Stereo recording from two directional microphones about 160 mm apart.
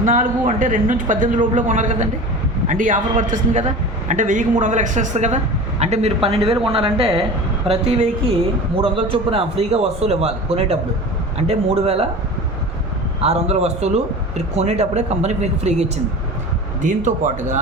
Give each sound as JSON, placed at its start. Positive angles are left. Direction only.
{"t": 0.0, "sound": "a man's voice", "side_deg": -50}
{"t": 13.2, "sound": "a man's voice", "side_deg": -40}